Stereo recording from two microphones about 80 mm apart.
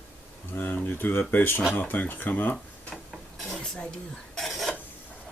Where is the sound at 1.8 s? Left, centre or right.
Left.